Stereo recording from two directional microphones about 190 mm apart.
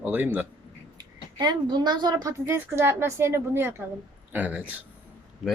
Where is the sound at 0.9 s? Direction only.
20° right (ahead or behind).